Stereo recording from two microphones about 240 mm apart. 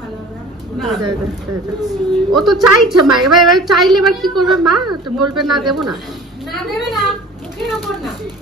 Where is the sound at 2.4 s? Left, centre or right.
Centre.